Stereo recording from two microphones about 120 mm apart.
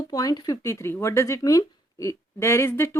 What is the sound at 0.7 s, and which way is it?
A woman's voice, 25° left (ahead or behind).